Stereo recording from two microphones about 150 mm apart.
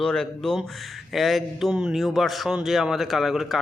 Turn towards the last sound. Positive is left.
turn(degrees=0)  # may be behind; listen again after turning